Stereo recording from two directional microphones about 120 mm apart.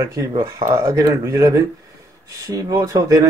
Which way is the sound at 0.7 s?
25° right (ahead or behind).